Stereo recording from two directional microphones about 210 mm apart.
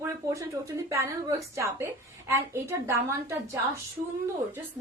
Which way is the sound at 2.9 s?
15° right (ahead or behind).